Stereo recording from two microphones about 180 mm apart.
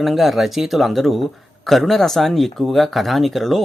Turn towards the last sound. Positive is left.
turn(degrees=0)  # may be behind; listen again after turning